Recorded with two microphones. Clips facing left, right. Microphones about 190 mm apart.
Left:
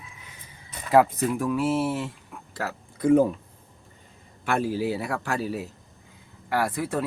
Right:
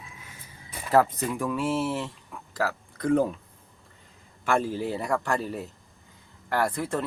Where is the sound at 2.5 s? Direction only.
5° left (ahead or behind).